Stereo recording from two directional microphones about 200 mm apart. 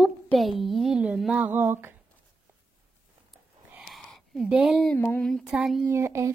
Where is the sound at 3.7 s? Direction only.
Centre (ahead or behind).